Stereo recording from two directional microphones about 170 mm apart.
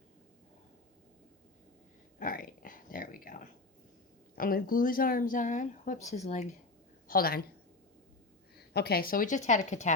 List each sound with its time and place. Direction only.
2.1 s a sound: 55° left (ahead or behind)
4.4 s speech: 60° left (ahead or behind); by 6.5 s 40° left (ahead or behind)
7.1 s a woman's voice: 60° left (ahead or behind)
8.5 s speech: 70° left (ahead or behind); by 9.9 s 45° left (ahead or behind)